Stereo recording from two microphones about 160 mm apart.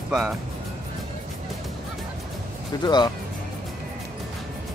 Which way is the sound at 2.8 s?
25° left (ahead or behind).